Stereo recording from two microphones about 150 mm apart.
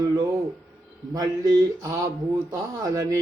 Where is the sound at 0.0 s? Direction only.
20° right (ahead or behind).